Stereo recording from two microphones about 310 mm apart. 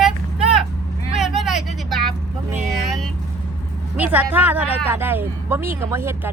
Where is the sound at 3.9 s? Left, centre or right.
Centre.